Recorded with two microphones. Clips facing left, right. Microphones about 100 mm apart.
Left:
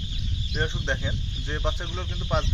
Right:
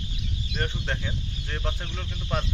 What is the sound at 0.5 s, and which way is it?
Speech, 15° left (ahead or behind).